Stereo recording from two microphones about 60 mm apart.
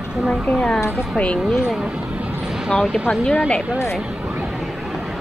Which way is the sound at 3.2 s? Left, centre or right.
Centre.